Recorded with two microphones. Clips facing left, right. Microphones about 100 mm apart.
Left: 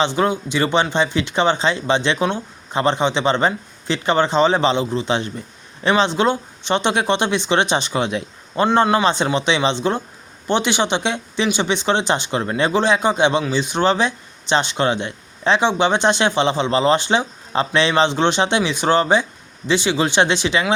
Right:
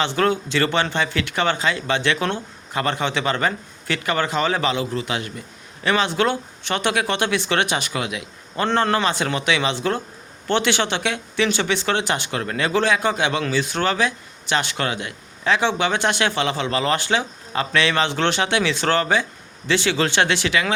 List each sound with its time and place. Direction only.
0.0 s speech: 15° left (ahead or behind)
8.6 s speech: 20° left (ahead or behind)